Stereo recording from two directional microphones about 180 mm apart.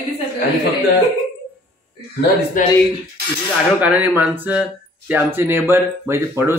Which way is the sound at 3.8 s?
10° right (ahead or behind).